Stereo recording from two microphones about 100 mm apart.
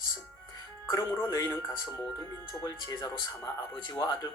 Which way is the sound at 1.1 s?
25° left (ahead or behind).